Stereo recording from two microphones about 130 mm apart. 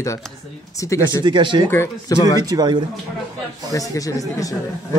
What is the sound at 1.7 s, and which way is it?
Speech, 25° left (ahead or behind).